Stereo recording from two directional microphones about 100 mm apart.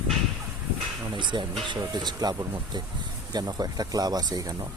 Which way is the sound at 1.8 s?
45° right (ahead or behind).